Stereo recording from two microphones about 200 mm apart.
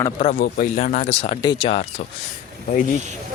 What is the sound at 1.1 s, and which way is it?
Speech, 30° left (ahead or behind).